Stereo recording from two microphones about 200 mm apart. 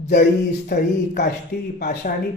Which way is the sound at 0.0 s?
55° left (ahead or behind).